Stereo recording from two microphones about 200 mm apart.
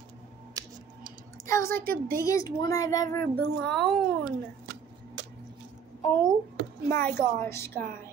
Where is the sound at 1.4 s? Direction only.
15° left (ahead or behind).